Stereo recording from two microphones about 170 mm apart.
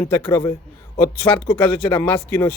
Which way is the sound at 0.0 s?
15° left (ahead or behind).